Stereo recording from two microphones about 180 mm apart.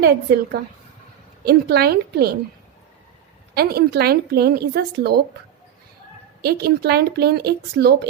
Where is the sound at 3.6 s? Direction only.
60° right (ahead or behind).